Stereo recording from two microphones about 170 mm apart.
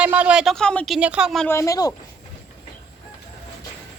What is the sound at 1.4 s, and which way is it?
Speech, 15° left (ahead or behind).